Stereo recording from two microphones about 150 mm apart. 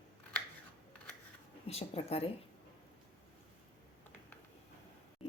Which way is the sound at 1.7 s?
40° left (ahead or behind).